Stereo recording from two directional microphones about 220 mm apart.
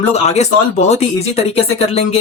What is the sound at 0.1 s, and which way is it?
Speech, 30° left (ahead or behind).